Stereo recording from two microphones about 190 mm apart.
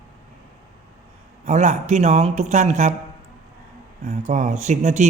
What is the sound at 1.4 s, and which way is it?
Speech, 40° right (ahead or behind).